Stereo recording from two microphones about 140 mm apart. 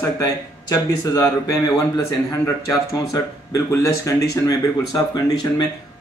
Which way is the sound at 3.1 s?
20° left (ahead or behind).